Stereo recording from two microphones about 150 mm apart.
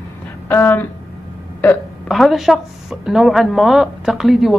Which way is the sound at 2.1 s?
Centre (ahead or behind).